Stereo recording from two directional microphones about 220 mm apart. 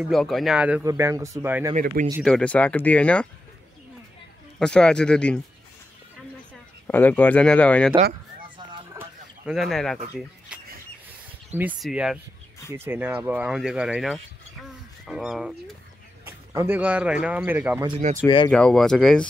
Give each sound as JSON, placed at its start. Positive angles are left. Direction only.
{"t": 0.0, "sound": "speech", "side_deg": 0}
{"t": 2.2, "sound": "speech", "side_deg": 5}
{"t": 4.6, "sound": "speech", "side_deg": 5}
{"t": 6.9, "sound": "speech", "side_deg": 10}
{"t": 9.0, "sound": "a sound", "side_deg": -10}
{"t": 9.5, "sound": "speech", "side_deg": 0}
{"t": 11.5, "sound": "speech", "side_deg": -5}
{"t": 17.8, "sound": "speech", "side_deg": -30}
{"t": 18.2, "sound": "speech", "side_deg": 20}
{"t": 18.5, "sound": "speech", "side_deg": 5}